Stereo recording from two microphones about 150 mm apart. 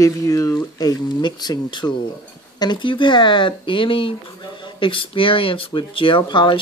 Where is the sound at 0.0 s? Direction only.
20° left (ahead or behind).